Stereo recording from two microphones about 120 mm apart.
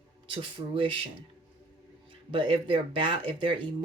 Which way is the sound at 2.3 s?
45° right (ahead or behind).